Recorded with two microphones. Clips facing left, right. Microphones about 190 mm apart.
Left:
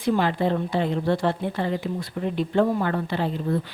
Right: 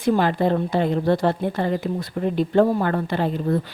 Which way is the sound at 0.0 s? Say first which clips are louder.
Right 3 dB; 45° right (ahead or behind).